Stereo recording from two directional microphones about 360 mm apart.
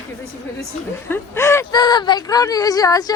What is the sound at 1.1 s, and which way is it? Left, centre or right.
Speech, centre.